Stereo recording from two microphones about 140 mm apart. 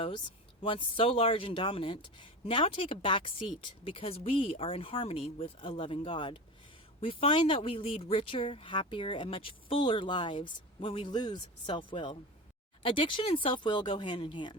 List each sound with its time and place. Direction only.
0.6 s speech: 40° left (ahead or behind)